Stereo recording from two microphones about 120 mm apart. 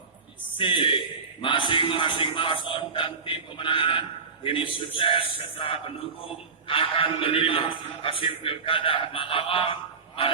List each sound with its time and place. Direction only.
0.5 s a man's voice: 45° left (ahead or behind)